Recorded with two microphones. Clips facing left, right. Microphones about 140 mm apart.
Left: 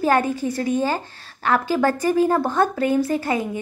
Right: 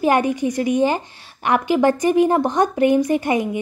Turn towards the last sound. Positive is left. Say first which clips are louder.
# right 3 dB
turn(degrees=-20)  # may be behind; listen again after turning